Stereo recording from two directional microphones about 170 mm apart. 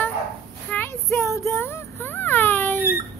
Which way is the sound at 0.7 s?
15° left (ahead or behind).